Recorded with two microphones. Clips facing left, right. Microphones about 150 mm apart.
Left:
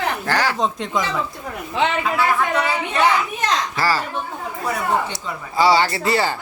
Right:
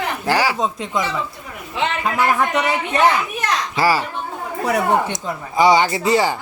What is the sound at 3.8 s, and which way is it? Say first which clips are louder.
Speech: right 6 dB; 15° right (ahead or behind).